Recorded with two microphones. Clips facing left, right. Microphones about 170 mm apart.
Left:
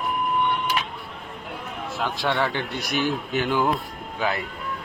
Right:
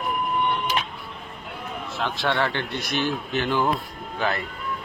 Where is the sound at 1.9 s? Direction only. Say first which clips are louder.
Even; 10° left (ahead or behind).